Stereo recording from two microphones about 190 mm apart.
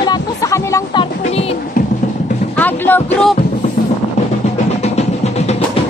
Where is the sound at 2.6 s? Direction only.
10° left (ahead or behind).